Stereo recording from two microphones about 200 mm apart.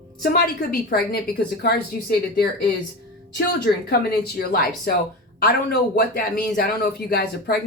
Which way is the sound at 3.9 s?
55° left (ahead or behind).